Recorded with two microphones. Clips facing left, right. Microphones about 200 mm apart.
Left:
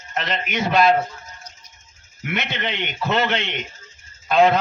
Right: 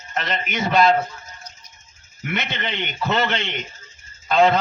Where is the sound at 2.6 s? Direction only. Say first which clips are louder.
Left 1 dB; 10° left (ahead or behind).